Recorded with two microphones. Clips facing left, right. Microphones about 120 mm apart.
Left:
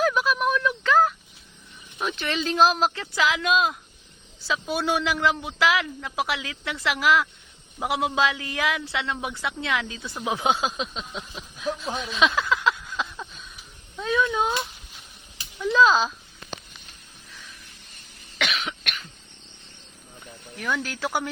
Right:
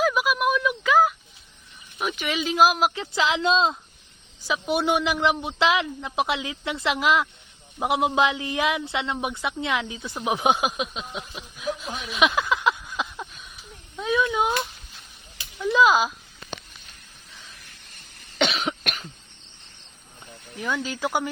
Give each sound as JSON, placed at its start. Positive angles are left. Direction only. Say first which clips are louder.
{"t": 0.0, "sound": "a sound", "louder": "even", "side_deg": -5}
{"t": 2.0, "sound": "speech", "louder": "even", "side_deg": -10}
{"t": 12.1, "sound": "a sound", "louder": "right 1 dB", "side_deg": -15}
{"t": 15.6, "sound": "speech", "louder": "even", "side_deg": -15}
{"t": 18.3, "sound": "cough", "louder": "right 5 dB", "side_deg": -35}
{"t": 20.6, "sound": "speech", "louder": "right 1 dB", "side_deg": -15}